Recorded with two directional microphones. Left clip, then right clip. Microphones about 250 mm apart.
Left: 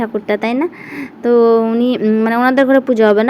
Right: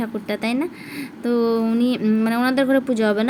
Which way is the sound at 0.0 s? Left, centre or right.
Centre.